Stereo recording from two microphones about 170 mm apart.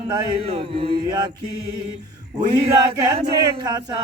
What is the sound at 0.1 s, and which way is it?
Mantra, 35° right (ahead or behind).